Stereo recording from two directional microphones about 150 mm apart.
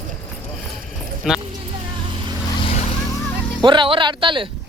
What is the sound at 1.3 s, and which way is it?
Speech, 5° right (ahead or behind).